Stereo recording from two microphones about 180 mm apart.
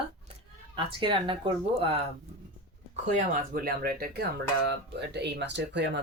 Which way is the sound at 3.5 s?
55° right (ahead or behind).